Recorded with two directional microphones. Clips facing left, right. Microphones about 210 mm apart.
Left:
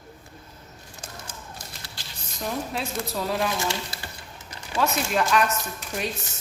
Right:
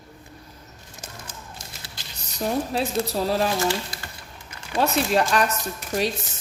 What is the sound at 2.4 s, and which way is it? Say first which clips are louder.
Speech: right 5 dB; 35° right (ahead or behind).